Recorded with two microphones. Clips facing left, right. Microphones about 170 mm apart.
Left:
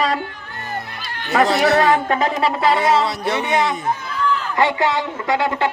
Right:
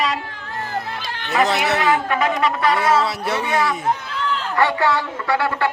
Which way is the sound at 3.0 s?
5° right (ahead or behind).